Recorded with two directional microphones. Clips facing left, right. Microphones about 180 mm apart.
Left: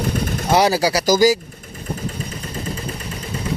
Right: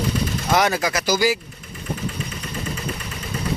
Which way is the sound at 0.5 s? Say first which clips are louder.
Left 4 dB; 30° left (ahead or behind).